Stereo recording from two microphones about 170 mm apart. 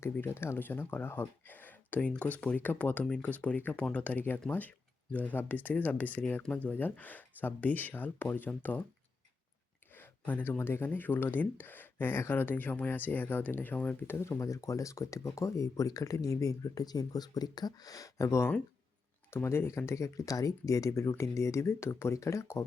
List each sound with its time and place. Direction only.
0.0 s speech: 15° left (ahead or behind)
9.9 s speech: 10° left (ahead or behind)